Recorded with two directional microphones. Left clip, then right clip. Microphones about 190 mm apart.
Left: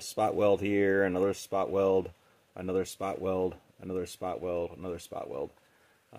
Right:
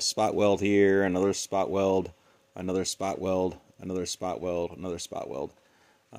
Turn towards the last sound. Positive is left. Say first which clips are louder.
# right 3 dB
turn(degrees=-40)  # may be behind; listen again after turning